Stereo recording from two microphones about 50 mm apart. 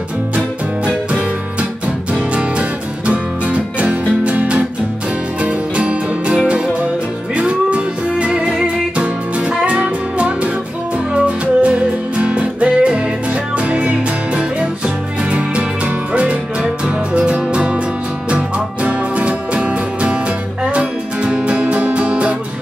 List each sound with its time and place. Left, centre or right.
3.1 s music: right
16.1 s music: right
18.9 s music: right